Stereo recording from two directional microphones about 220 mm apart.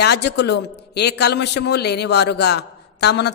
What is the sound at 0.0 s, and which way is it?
A man's voice, 50° left (ahead or behind).